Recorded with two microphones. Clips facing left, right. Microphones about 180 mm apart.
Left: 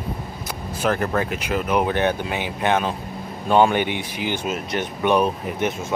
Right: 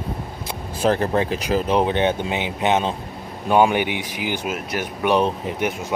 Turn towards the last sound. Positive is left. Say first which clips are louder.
# even
turn(degrees=-15)  # may be behind; listen again after turning